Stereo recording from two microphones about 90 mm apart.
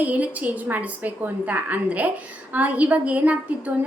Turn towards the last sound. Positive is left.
turn(degrees=-15)  # may be behind; listen again after turning